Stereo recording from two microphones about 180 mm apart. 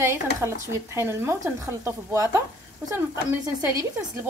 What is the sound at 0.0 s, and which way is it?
Speech, 15° right (ahead or behind).